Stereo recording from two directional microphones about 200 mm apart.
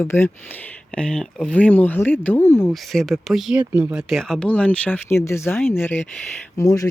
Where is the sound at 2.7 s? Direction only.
Centre (ahead or behind).